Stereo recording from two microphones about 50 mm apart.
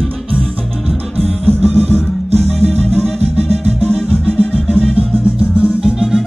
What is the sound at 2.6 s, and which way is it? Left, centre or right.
Music, centre.